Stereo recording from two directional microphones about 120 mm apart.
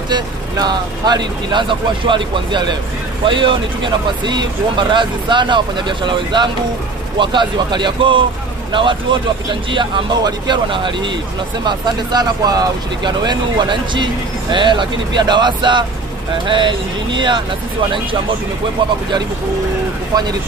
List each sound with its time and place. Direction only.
0.1 s speech: 35° right (ahead or behind)